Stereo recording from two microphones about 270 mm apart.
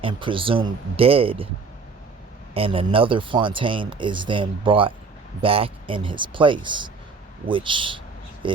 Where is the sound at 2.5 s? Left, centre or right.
Centre.